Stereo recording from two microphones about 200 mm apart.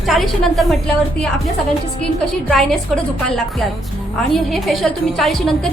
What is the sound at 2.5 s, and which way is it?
Speech, centre (ahead or behind).